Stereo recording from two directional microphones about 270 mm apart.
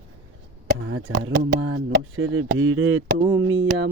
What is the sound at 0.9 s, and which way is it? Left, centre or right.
Speech, right.